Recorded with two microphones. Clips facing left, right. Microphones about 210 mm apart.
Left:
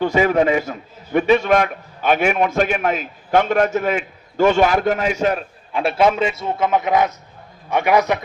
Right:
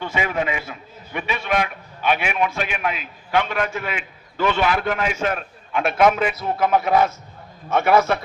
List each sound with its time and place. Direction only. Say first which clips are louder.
0.0 s a man's voice: left 8 dB; 40° left (ahead or behind); by 8.2 s 15° left (ahead or behind)